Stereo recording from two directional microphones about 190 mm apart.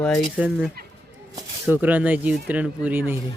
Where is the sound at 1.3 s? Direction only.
10° right (ahead or behind).